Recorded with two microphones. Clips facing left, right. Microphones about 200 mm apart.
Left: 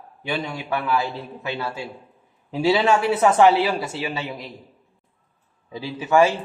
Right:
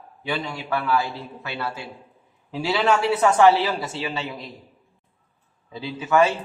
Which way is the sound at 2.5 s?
20° left (ahead or behind).